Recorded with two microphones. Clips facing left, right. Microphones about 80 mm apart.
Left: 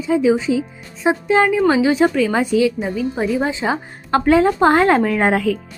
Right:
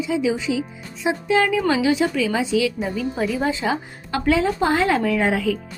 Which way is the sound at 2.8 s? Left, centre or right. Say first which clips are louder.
Left 3 dB; centre.